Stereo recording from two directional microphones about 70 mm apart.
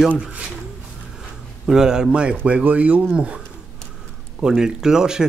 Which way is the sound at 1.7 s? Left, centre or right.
Centre.